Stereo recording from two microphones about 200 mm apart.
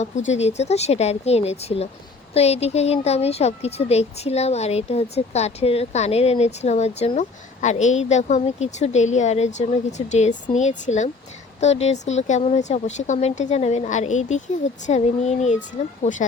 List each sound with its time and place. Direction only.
0.3 s speech: 35° left (ahead or behind)